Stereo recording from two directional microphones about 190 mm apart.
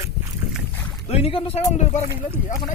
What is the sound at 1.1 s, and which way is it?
Speech, 30° left (ahead or behind).